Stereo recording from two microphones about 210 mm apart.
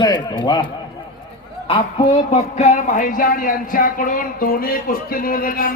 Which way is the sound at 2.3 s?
35° left (ahead or behind).